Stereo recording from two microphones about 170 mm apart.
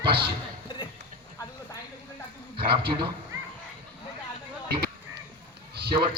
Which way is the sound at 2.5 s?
30° right (ahead or behind).